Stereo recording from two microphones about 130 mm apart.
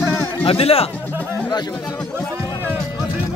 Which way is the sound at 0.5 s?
50° left (ahead or behind).